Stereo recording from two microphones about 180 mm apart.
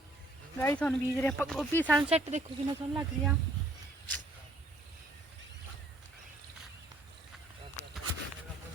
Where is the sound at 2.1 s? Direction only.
35° right (ahead or behind).